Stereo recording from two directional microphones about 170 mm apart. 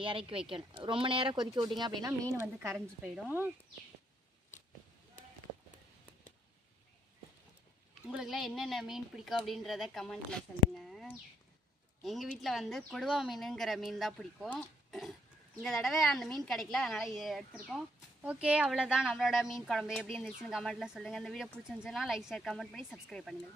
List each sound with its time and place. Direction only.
0.0 s speech: 30° right (ahead or behind); by 3.5 s 10° right (ahead or behind)
8.0 s a woman's voice: 5° right (ahead or behind)